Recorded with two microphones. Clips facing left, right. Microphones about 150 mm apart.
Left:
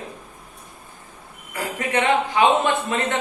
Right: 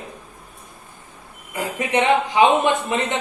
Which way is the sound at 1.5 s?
20° right (ahead or behind).